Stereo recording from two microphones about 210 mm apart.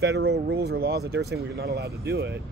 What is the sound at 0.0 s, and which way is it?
Speech, 55° right (ahead or behind).